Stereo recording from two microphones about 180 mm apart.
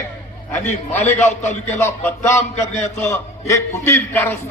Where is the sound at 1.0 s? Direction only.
40° left (ahead or behind).